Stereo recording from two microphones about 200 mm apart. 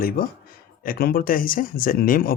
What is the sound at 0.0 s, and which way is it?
Speech, 45° left (ahead or behind).